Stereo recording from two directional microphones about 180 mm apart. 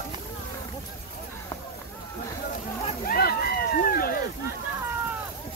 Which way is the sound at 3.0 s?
55° left (ahead or behind).